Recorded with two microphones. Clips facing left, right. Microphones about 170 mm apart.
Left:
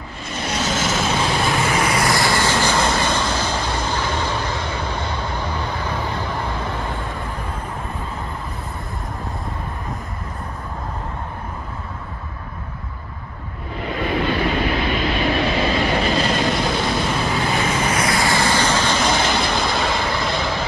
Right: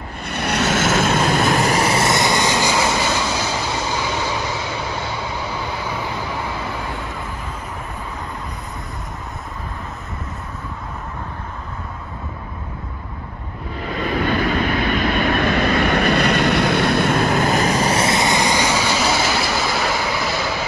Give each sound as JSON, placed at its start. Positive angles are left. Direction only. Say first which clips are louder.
{"t": 0.2, "sound": "vehicle", "louder": "right 3 dB", "side_deg": -60}
{"t": 14.9, "sound": "vehicle", "louder": "right 2 dB", "side_deg": -50}